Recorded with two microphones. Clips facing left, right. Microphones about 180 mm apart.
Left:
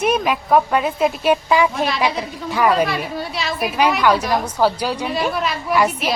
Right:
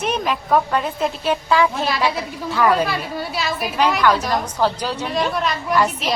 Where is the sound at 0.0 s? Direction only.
10° left (ahead or behind).